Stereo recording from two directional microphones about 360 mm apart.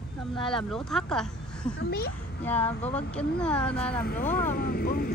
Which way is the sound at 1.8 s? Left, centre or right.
Left.